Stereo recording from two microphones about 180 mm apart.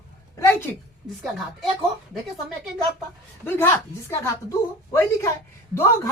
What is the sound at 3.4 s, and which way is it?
A woman's voice, 10° left (ahead or behind).